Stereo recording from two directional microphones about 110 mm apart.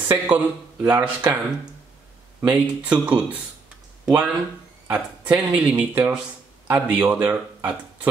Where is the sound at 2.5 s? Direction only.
15° right (ahead or behind).